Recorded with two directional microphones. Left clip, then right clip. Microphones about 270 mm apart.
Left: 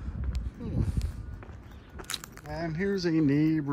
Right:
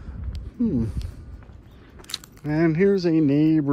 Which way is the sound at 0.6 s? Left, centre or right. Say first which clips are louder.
Right 12 dB; right.